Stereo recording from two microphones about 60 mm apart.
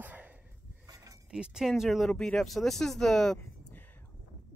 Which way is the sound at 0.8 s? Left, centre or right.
Right.